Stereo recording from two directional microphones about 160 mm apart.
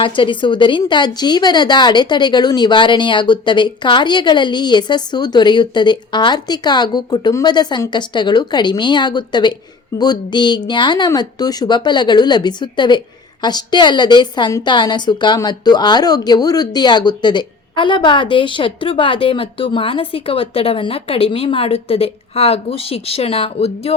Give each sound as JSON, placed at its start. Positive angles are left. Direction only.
{"t": 0.0, "sound": "a woman's voice", "side_deg": 30}